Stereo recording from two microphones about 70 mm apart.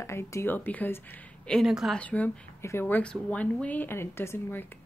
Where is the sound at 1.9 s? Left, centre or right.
Centre.